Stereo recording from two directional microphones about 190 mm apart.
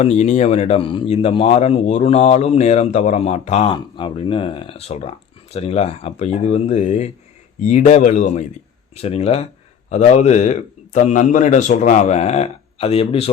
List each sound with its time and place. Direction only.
0.0 s a man's voice: 35° left (ahead or behind)